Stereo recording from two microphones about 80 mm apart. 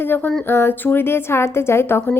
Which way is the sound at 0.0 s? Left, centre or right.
Left.